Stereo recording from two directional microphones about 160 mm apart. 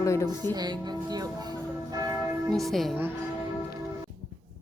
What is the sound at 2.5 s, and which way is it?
Speech, centre (ahead or behind).